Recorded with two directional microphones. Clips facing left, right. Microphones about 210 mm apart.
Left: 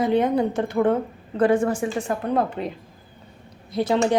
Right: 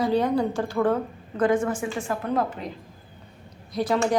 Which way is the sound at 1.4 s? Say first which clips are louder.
Left 3 dB; 35° left (ahead or behind).